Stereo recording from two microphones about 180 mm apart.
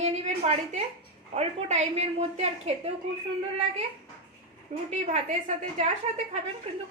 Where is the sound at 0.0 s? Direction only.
40° right (ahead or behind).